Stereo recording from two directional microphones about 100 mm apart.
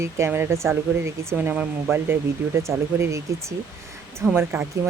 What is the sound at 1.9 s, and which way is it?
Speech, 25° right (ahead or behind).